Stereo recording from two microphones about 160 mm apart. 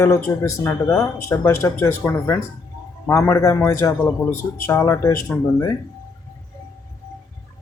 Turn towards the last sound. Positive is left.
turn(degrees=20)  # may be behind; listen again after turning